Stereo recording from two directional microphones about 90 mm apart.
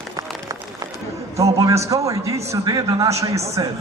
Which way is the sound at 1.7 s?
35° right (ahead or behind).